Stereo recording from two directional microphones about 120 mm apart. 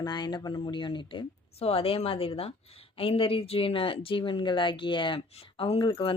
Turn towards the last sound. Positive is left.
turn(degrees=50)  # may be behind; listen again after turning